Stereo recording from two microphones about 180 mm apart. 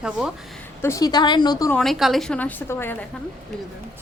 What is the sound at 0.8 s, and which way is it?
Speech, 15° left (ahead or behind).